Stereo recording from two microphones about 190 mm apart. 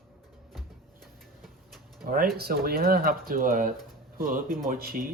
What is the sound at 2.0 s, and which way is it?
Speech, 50° right (ahead or behind).